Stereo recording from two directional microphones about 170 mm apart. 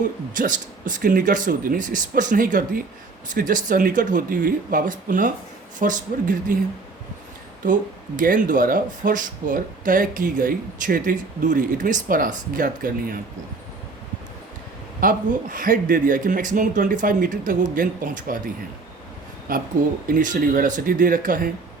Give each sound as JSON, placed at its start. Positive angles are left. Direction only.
{"t": 0.0, "sound": "speech", "side_deg": -50}
{"t": 7.6, "sound": "speech", "side_deg": -50}
{"t": 15.0, "sound": "speech", "side_deg": -55}
{"t": 19.5, "sound": "speech", "side_deg": -55}